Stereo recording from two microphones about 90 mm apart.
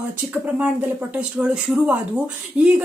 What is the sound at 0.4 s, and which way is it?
Speech, 15° right (ahead or behind).